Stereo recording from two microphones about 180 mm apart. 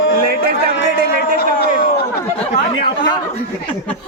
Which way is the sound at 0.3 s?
55° right (ahead or behind).